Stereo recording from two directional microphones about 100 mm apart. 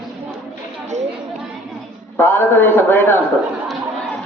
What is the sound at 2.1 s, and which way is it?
A man's voice, 20° left (ahead or behind).